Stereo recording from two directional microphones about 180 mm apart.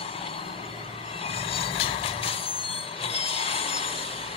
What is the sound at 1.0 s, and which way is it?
Train, 35° left (ahead or behind).